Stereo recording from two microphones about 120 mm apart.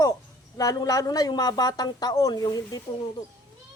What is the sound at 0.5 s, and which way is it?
A woman's voice, 30° left (ahead or behind).